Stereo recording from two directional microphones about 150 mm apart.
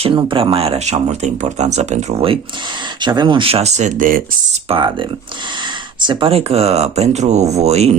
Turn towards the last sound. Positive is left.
turn(degrees=-45)  # may be behind; listen again after turning